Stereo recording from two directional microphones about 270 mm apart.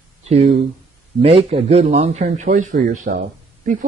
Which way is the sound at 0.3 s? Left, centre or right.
Right.